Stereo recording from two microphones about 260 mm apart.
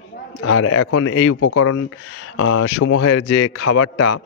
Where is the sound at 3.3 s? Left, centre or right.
Left.